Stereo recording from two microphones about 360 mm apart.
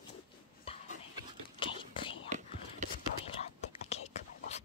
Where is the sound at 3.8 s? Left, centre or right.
Centre.